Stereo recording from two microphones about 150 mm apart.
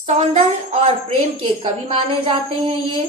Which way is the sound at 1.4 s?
35° right (ahead or behind).